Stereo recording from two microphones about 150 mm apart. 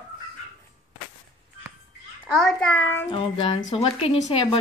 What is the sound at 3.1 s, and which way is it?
Speech, 35° left (ahead or behind).